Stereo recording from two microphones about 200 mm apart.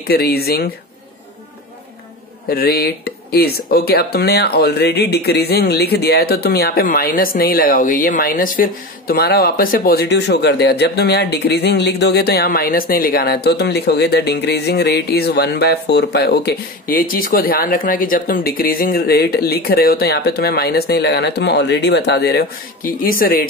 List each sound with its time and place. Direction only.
0.1 s speech: 50° left (ahead or behind)
2.5 s speech: 50° left (ahead or behind)